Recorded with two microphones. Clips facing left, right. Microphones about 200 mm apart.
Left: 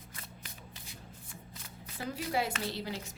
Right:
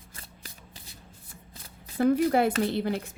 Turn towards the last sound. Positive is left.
turn(degrees=-55)  # may be behind; listen again after turning